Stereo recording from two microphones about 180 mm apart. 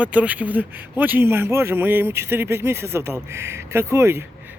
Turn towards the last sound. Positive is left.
turn(degrees=-15)  # may be behind; listen again after turning